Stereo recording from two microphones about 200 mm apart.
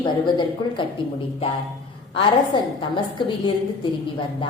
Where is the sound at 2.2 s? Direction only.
25° left (ahead or behind).